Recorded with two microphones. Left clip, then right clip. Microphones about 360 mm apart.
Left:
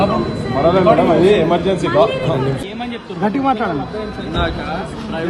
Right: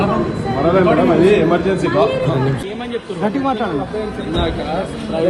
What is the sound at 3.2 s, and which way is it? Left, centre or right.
Speech, centre.